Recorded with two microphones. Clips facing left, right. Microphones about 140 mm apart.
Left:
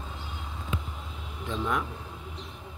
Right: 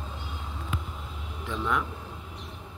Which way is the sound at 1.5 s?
30° left (ahead or behind).